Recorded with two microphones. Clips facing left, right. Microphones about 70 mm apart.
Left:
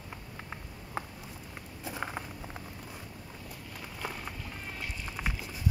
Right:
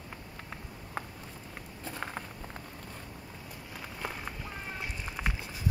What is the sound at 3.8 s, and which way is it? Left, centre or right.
Walk, centre.